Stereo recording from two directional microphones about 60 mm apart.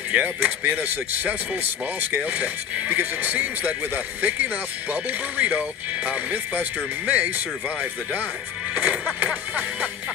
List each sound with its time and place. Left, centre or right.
0.1 s speech: right